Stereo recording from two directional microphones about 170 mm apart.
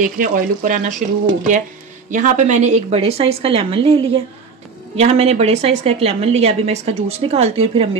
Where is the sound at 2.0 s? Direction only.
50° right (ahead or behind).